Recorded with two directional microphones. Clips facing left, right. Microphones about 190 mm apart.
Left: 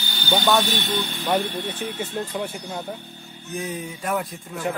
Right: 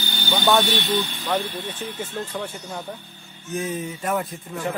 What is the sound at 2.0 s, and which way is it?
Speech, 10° left (ahead or behind).